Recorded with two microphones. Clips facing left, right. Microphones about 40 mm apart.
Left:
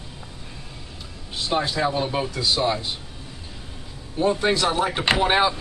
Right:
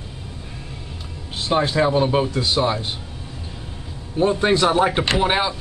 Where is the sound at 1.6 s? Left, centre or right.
Right.